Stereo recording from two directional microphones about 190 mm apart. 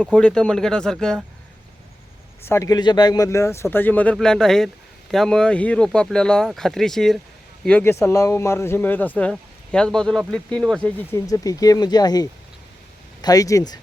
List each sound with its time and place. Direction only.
0.1 s speech: 5° left (ahead or behind)
2.5 s speech: 15° left (ahead or behind)